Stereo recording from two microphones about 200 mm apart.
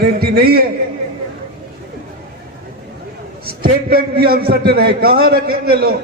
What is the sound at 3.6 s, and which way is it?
A man's voice, 50° right (ahead or behind).